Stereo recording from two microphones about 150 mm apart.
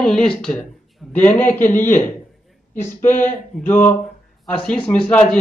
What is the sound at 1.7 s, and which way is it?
Speech, 60° left (ahead or behind).